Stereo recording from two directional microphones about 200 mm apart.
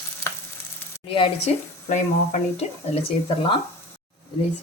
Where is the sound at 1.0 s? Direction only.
25° left (ahead or behind).